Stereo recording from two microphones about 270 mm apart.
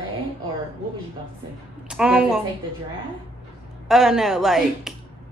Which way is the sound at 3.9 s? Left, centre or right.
Centre.